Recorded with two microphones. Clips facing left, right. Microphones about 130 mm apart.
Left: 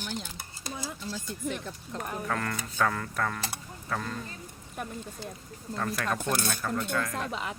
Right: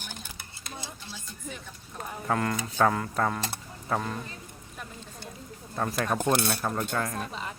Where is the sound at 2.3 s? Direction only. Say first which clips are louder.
Right 8 dB; 20° right (ahead or behind).